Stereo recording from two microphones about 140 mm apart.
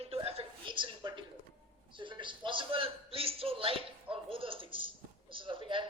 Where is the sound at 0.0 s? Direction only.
45° right (ahead or behind).